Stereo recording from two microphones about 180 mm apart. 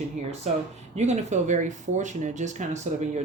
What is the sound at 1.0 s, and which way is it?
Speech, 40° right (ahead or behind).